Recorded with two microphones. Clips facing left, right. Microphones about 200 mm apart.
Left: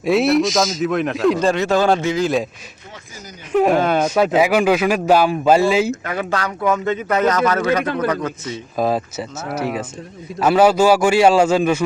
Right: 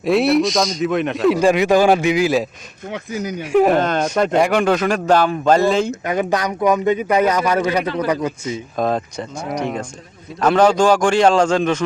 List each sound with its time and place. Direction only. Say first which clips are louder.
0.0 s a man's voice: even; centre (ahead or behind)
1.4 s speech: right 3 dB; 15° right (ahead or behind)
2.9 s speech: right 15 dB; 65° right (ahead or behind)
3.5 s speech: right 1 dB; centre (ahead or behind)
5.9 s speech: right 3 dB; 20° right (ahead or behind)
8.8 s a man's voice: left 1 dB; 5° left (ahead or behind)